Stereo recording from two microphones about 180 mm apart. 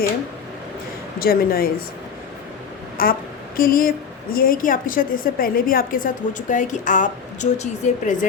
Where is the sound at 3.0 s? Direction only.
50° left (ahead or behind).